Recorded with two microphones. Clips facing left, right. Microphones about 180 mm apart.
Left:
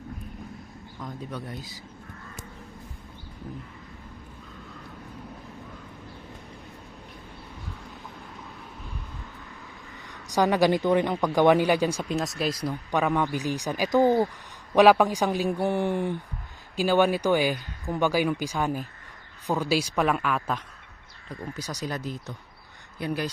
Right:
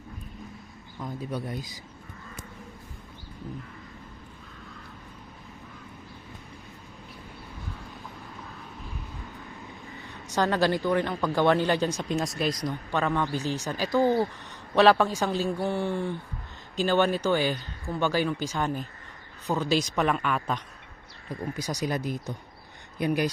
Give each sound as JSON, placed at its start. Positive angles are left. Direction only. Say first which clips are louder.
{"t": 0.9, "sound": "speech", "louder": "right 3 dB", "side_deg": -5}
{"t": 10.3, "sound": "speech", "louder": "left 3 dB", "side_deg": 15}
{"t": 12.6, "sound": "speech", "louder": "left 2 dB", "side_deg": 15}
{"t": 21.5, "sound": "speech", "louder": "right 3 dB", "side_deg": -10}